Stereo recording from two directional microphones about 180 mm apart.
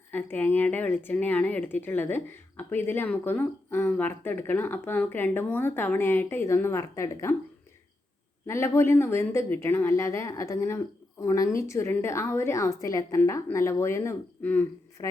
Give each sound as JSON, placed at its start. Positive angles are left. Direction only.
{"t": 0.1, "sound": "speech", "side_deg": 10}
{"t": 8.4, "sound": "speech", "side_deg": 15}